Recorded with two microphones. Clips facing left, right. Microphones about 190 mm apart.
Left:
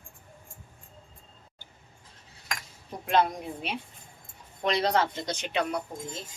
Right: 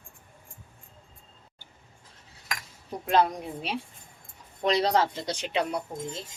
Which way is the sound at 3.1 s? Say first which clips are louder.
Right 1 dB; 35° right (ahead or behind).